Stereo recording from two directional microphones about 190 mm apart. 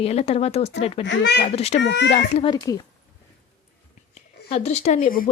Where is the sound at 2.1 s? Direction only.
30° left (ahead or behind).